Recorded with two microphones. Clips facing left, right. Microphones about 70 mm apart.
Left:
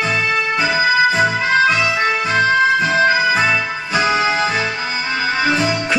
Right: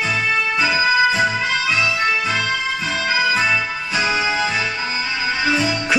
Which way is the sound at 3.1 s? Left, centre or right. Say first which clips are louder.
Left 3 dB; left.